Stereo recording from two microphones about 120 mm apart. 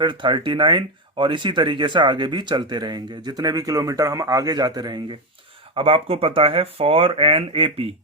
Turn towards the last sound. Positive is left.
turn(degrees=-50)  # may be behind; listen again after turning